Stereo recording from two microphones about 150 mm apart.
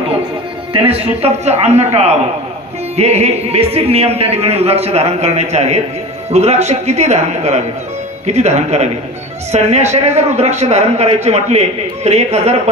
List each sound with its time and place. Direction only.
0.7 s a man's voice: 40° right (ahead or behind)